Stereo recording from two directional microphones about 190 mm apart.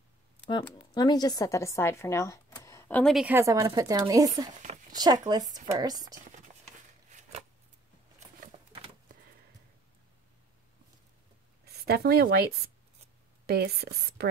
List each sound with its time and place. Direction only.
0.5 s speech: 25° left (ahead or behind); by 3.3 s centre (ahead or behind)
3.3 s speech: 15° right (ahead or behind)
4.6 s a sound: 40° right (ahead or behind)
4.9 s speech: 20° right (ahead or behind)
11.6 s a woman's voice: 55° right (ahead or behind)